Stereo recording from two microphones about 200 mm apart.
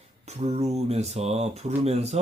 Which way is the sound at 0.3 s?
30° right (ahead or behind).